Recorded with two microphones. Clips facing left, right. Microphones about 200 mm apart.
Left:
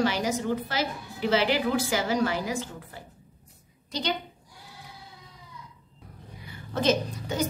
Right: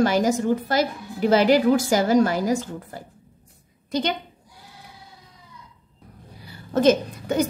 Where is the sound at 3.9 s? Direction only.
55° right (ahead or behind).